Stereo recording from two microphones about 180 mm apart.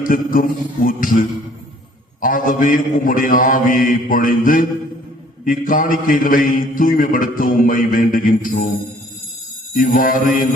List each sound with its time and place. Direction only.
0.0 s a man's voice: 50° left (ahead or behind)
2.2 s a man's voice: 50° left (ahead or behind)
9.7 s a man's voice: 50° left (ahead or behind)